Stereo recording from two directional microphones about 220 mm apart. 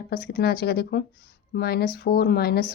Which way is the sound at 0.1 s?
45° left (ahead or behind).